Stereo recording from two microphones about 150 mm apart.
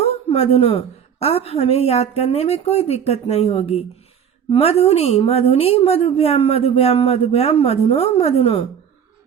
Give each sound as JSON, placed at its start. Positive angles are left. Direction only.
{"t": 0.0, "sound": "a woman's voice", "side_deg": 45}